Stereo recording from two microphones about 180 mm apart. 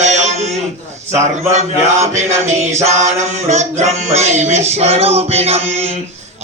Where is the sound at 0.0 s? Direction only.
40° right (ahead or behind).